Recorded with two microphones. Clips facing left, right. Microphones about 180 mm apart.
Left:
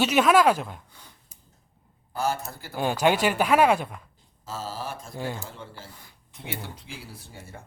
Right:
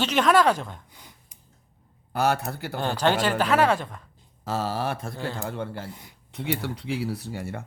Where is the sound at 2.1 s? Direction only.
70° right (ahead or behind).